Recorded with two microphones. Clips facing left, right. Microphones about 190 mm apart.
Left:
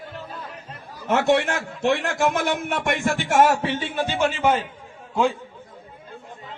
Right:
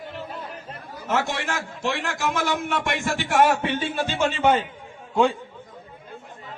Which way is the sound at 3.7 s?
20° left (ahead or behind).